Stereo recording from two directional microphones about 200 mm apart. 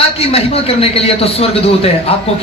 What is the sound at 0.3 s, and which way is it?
A man's voice, 30° left (ahead or behind).